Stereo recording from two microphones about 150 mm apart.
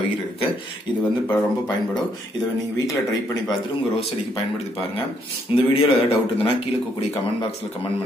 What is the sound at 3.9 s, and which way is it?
A man's voice, 40° left (ahead or behind).